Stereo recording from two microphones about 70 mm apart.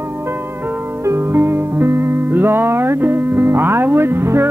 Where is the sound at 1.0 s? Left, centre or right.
Right.